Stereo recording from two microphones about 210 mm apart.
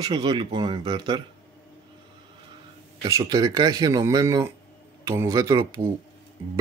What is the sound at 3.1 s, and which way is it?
Speech, 15° right (ahead or behind).